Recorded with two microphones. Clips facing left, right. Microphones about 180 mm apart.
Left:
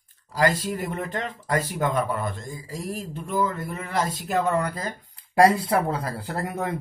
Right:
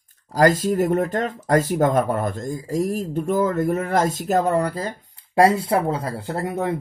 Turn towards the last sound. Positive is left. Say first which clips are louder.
# right 4 dB
turn(degrees=-25)  # may be behind; listen again after turning